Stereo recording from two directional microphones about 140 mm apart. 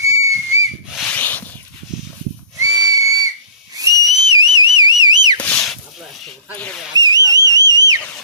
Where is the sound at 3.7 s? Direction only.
25° right (ahead or behind).